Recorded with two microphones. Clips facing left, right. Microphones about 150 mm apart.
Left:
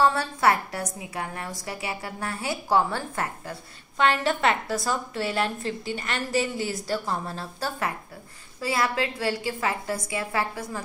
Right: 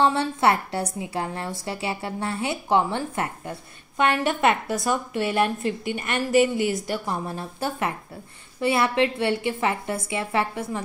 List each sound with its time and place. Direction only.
0.0 s a woman's voice: 25° right (ahead or behind)